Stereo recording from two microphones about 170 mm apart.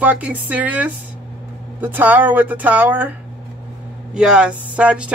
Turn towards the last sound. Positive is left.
turn(degrees=-5)  # may be behind; listen again after turning